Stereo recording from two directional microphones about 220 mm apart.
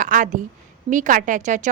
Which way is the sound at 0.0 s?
35° right (ahead or behind).